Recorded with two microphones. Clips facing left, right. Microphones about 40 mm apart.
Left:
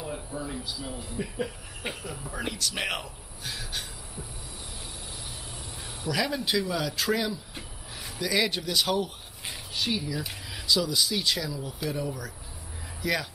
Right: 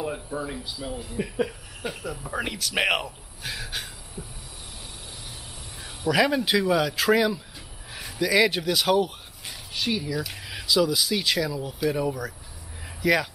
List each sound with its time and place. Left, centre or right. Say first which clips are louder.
0.0 s speech: right 5 dB; right
6.0 s speech: right 7 dB; centre